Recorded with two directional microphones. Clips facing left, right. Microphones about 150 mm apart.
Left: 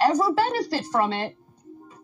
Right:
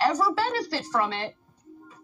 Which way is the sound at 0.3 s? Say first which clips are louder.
Left 4 dB; 45° left (ahead or behind).